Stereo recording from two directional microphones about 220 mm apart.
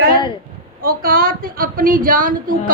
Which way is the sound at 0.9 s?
40° right (ahead or behind).